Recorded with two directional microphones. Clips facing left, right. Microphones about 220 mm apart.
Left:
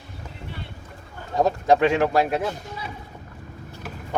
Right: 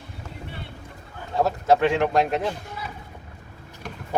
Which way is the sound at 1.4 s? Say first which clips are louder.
Left 1 dB; 15° left (ahead or behind).